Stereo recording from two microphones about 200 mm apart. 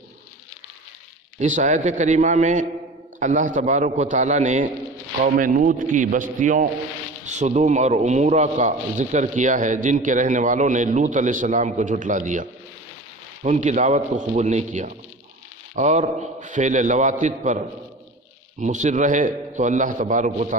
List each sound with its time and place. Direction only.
1.4 s a man's voice: 35° right (ahead or behind)
18.6 s a man's voice: 40° right (ahead or behind)